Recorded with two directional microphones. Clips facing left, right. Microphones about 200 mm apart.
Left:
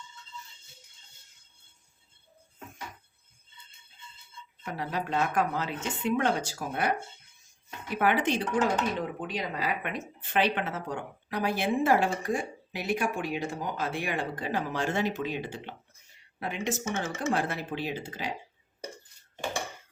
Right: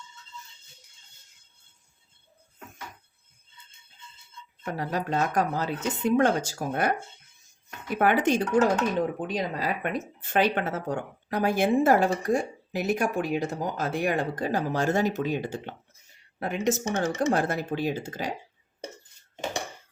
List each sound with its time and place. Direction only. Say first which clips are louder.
4.6 s speech: right 3 dB; 45° right (ahead or behind)
7.9 s speech: right 4 dB; 45° right (ahead or behind)